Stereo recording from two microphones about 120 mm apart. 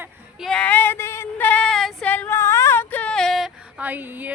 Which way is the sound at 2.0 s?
15° left (ahead or behind).